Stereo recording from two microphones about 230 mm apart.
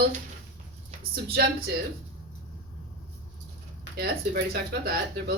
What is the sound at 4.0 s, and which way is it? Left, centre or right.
Speech, right.